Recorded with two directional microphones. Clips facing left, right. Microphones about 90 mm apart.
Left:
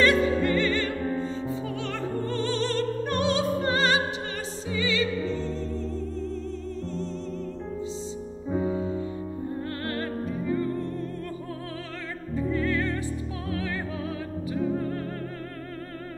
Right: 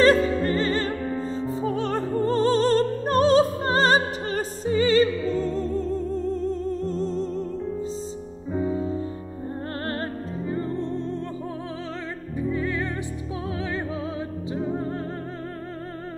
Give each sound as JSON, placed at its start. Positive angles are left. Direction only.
{"t": 0.0, "sound": "music", "side_deg": -35}
{"t": 9.8, "sound": "music", "side_deg": -35}
{"t": 12.4, "sound": "music", "side_deg": -20}